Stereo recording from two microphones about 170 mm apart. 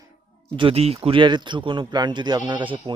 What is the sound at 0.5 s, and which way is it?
Speech, 30° right (ahead or behind).